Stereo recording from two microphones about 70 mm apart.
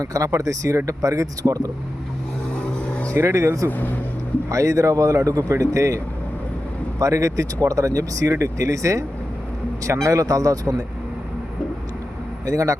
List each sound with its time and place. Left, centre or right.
0.0 s speech: right
3.2 s speech: right
3.7 s speech: left
4.4 s speech: right
7.0 s speech: right
12.5 s speech: right